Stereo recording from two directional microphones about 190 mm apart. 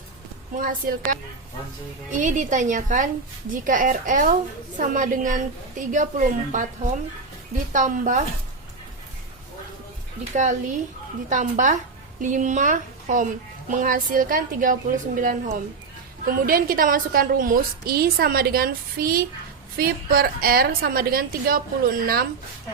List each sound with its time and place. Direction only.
0.5 s a woman's voice: 45° right (ahead or behind)
7.7 s speech: 40° right (ahead or behind)
10.3 s a woman's voice: 40° right (ahead or behind)